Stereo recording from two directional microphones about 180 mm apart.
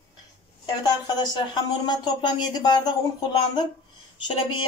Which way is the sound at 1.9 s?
25° left (ahead or behind).